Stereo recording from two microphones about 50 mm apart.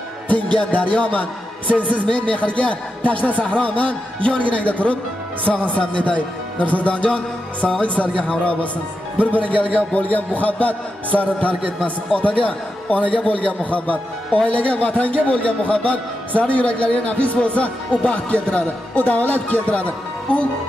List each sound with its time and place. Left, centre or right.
0.3 s a man's voice: left